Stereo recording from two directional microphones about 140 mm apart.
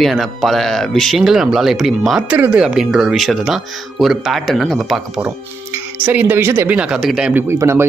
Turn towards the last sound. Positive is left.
turn(degrees=-20)  # may be behind; listen again after turning